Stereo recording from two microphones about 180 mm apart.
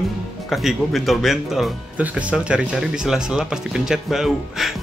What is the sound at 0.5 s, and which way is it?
Speech, centre (ahead or behind).